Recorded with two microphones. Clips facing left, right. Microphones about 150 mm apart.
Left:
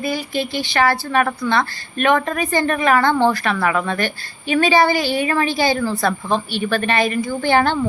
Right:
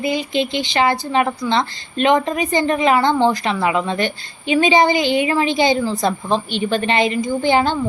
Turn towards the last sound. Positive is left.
turn(degrees=-15)  # may be behind; listen again after turning